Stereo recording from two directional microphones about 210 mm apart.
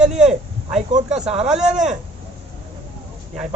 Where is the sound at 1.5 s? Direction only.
5° right (ahead or behind).